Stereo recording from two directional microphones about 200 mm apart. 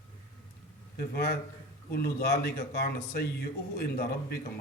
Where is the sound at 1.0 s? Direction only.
50° left (ahead or behind).